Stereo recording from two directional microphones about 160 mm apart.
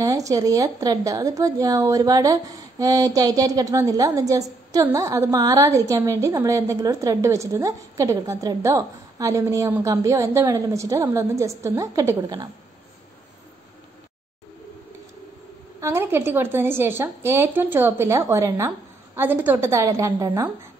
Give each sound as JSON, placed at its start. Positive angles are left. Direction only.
{"t": 0.0, "sound": "a woman's voice", "side_deg": -20}
{"t": 15.8, "sound": "a woman's voice", "side_deg": -15}